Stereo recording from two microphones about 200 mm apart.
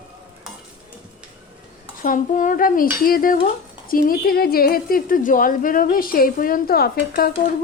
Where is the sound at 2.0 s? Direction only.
40° left (ahead or behind).